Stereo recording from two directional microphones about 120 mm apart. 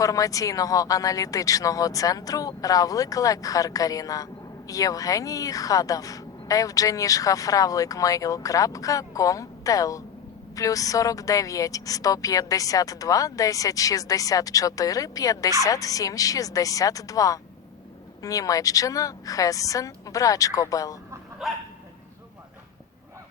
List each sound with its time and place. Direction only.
0.0 s a woman's voice: 30° left (ahead or behind)
21.4 s dog: centre (ahead or behind)